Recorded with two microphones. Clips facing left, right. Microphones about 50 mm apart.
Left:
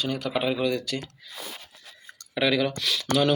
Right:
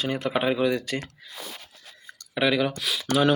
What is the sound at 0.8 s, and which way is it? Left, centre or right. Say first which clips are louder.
Speech: right 1 dB; right.